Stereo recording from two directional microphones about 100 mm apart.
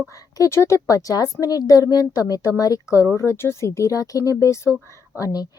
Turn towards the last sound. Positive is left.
turn(degrees=40)  # may be behind; listen again after turning